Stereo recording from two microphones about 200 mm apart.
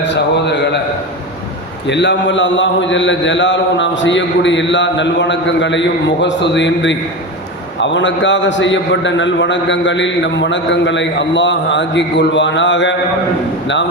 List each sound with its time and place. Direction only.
0.0 s a man's voice: 60° left (ahead or behind)
1.9 s a man's voice: 60° left (ahead or behind)